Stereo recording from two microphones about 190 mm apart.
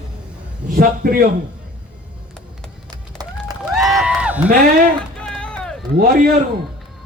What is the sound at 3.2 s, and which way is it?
Run, 20° right (ahead or behind).